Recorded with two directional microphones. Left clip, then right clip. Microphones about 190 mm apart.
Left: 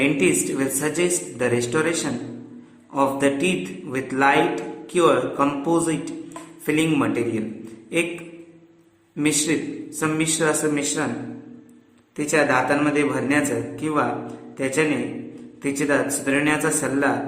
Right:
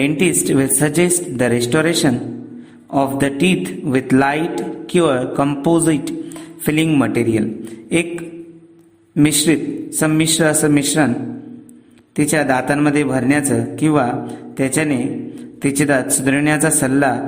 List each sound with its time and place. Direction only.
0.0 s a man's voice: 50° right (ahead or behind)
12.1 s a man's voice: 50° right (ahead or behind)